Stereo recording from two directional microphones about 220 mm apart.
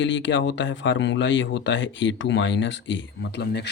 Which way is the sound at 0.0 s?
55° left (ahead or behind).